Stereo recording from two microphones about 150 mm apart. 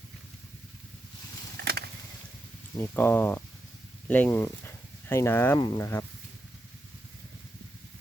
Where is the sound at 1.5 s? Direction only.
90° right.